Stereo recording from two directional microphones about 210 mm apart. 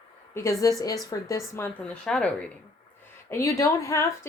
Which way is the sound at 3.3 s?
15° left (ahead or behind).